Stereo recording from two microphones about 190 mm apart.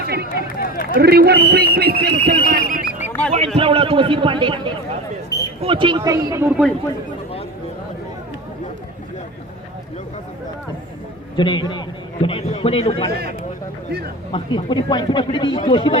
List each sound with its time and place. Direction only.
0.0 s run: 55° right (ahead or behind)
0.4 s run: 45° left (ahead or behind)
0.9 s speech: 55° right (ahead or behind)
3.3 s a man's voice: 30° right (ahead or behind)
5.3 s basketball bounce: 20° left (ahead or behind)
5.6 s a man's voice: 25° right (ahead or behind)
11.3 s speech: 25° left (ahead or behind)
14.3 s speech: 25° left (ahead or behind)